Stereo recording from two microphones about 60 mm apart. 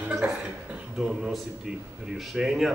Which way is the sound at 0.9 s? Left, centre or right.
Centre.